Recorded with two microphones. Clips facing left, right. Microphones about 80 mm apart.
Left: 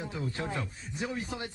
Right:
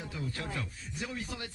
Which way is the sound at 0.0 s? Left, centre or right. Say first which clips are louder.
Left 4 dB; left.